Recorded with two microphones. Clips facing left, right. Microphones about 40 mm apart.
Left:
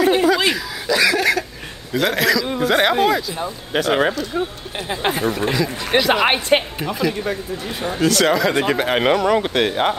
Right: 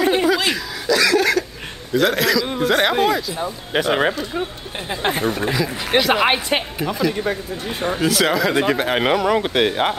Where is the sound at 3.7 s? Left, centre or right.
Centre.